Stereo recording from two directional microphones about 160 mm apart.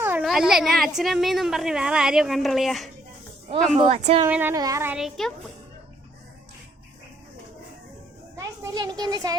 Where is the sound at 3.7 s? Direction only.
40° right (ahead or behind).